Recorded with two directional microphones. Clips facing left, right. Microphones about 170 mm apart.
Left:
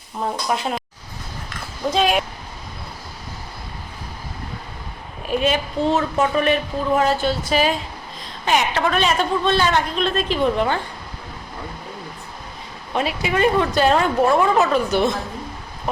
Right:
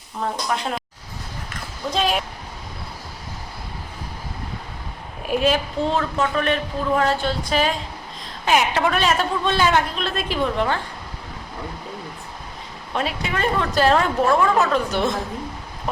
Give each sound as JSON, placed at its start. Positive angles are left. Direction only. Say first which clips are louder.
{"t": 0.2, "sound": "speech", "louder": "left 2 dB", "side_deg": 5}
{"t": 1.9, "sound": "a woman's voice", "louder": "left 3 dB", "side_deg": 5}
{"t": 5.3, "sound": "a woman's voice", "louder": "even", "side_deg": 0}
{"t": 6.1, "sound": "a woman's voice", "louder": "left 3 dB", "side_deg": 10}
{"t": 8.4, "sound": "a woman's voice", "louder": "even", "side_deg": -5}
{"t": 12.9, "sound": "a woman's voice", "louder": "left 3 dB", "side_deg": 5}
{"t": 14.3, "sound": "speech", "louder": "left 1 dB", "side_deg": 15}
{"t": 14.7, "sound": "a woman's voice", "louder": "left 2 dB", "side_deg": 0}